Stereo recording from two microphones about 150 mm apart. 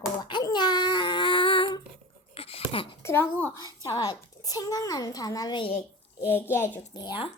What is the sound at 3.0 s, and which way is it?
Speech, 15° left (ahead or behind).